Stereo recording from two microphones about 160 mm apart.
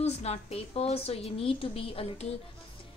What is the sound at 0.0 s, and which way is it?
A woman's voice, 40° left (ahead or behind).